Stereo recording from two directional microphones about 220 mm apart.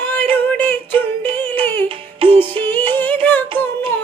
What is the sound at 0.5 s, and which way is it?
Music, 5° left (ahead or behind).